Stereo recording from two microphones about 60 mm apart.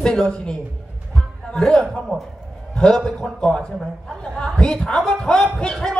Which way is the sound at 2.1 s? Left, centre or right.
Centre.